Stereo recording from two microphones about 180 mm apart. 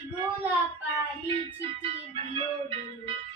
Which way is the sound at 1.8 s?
30° right (ahead or behind).